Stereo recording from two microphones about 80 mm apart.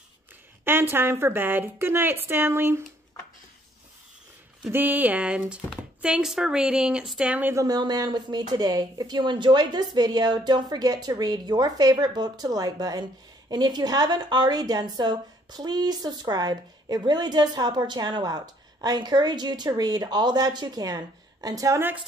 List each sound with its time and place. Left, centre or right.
0.7 s a woman's voice: right
4.6 s a woman's voice: right
7.5 s speech: right